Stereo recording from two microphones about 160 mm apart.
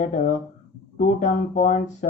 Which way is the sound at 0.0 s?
50° left (ahead or behind).